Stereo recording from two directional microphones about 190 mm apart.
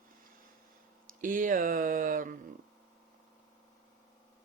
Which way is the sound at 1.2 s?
45° right (ahead or behind).